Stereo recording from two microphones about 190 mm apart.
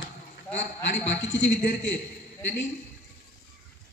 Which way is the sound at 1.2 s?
75° left (ahead or behind).